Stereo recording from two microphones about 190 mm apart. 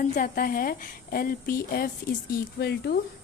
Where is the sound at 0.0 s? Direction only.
45° left (ahead or behind).